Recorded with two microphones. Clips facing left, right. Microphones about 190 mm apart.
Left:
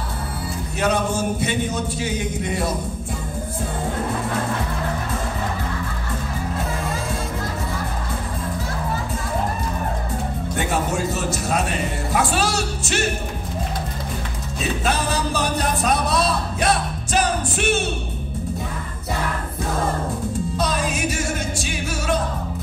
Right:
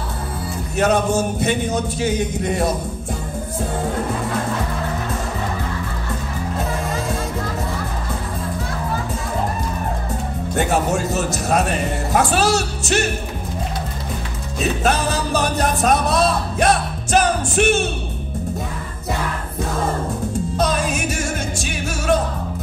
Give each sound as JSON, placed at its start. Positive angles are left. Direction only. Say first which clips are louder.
{"t": 0.7, "sound": "speech", "louder": "right 4 dB", "side_deg": -45}
{"t": 10.5, "sound": "speech", "louder": "right 5 dB", "side_deg": -45}
{"t": 14.8, "sound": "music", "louder": "right 2 dB", "side_deg": -45}